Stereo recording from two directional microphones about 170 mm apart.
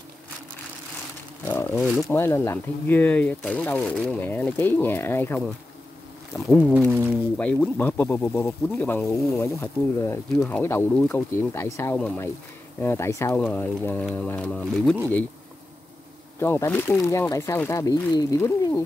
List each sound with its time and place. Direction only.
1.4 s speech: 10° left (ahead or behind)
1.9 s speech: centre (ahead or behind)
2.1 s speech: 15° left (ahead or behind)
16.3 s speech: 15° left (ahead or behind)